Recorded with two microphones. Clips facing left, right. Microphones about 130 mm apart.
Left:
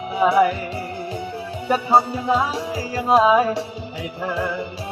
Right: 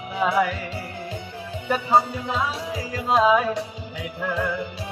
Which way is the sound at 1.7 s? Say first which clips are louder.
Left 3 dB; 35° left (ahead or behind).